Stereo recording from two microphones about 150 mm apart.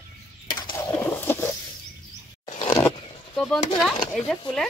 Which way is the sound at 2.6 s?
15° left (ahead or behind).